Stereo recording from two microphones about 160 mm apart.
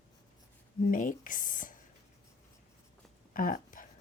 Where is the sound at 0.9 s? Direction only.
55° left (ahead or behind).